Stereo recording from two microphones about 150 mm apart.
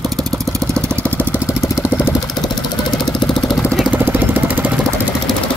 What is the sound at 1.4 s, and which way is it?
Vehicle, 20° left (ahead or behind).